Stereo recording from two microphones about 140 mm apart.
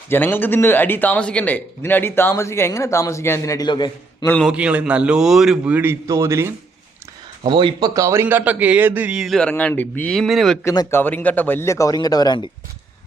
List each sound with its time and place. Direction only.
0.1 s a man's voice: 15° left (ahead or behind); by 4.3 s 30° left (ahead or behind)
4.4 s a man's voice: 10° right (ahead or behind)
7.4 s a man's voice: 35° right (ahead or behind); by 9.5 s centre (ahead or behind)
9.5 s a man's voice: 10° left (ahead or behind)
10.6 s a man's voice: 20° left (ahead or behind)